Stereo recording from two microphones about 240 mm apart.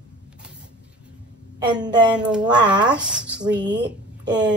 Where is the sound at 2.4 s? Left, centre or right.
Centre.